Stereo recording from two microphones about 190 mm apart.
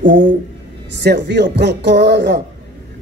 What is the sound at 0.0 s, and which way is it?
A man's voice, 70° right (ahead or behind).